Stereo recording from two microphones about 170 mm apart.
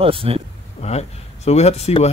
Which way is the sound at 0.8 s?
40° left (ahead or behind).